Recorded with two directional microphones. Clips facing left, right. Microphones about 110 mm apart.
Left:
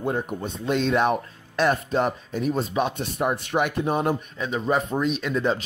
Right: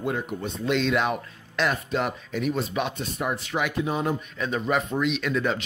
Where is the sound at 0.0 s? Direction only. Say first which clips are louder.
Left 2 dB; 35° left (ahead or behind).